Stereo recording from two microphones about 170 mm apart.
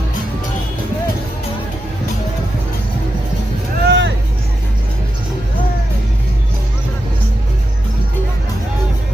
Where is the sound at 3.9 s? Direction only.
90° right.